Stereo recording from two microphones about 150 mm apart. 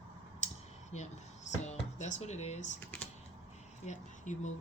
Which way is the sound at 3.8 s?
55° left (ahead or behind).